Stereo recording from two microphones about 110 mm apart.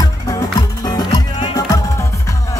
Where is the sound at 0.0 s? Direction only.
35° left (ahead or behind).